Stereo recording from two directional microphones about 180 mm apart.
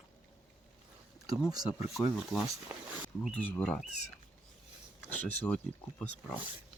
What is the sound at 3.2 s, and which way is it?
Speech, 10° left (ahead or behind).